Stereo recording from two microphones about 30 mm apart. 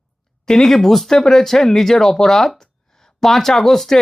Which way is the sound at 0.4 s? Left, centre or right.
Centre.